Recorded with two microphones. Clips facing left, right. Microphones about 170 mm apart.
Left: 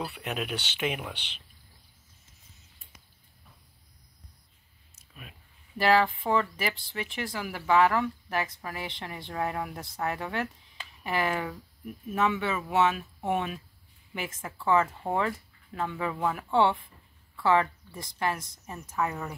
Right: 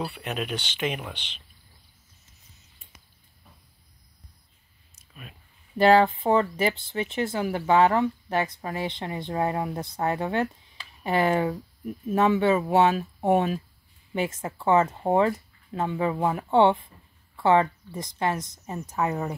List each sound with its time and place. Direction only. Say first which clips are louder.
0.0 s speech: right 3 dB; centre (ahead or behind)
4.9 s a sound: right 3 dB; 5° left (ahead or behind)
5.8 s a woman's voice: right 5 dB; 25° right (ahead or behind)